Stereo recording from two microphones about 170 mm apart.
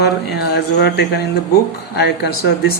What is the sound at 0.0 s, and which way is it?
Speech, 70° left (ahead or behind).